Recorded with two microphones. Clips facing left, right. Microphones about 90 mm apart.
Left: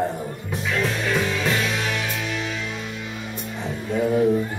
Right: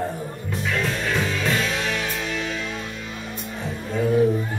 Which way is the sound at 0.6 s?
5° left (ahead or behind).